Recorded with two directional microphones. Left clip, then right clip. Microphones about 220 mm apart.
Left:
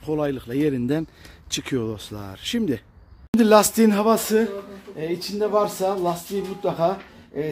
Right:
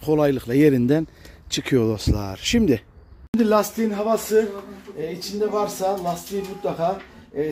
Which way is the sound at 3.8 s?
45° left (ahead or behind).